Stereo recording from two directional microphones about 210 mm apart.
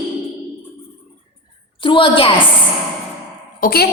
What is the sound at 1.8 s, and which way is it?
Speech, 25° left (ahead or behind).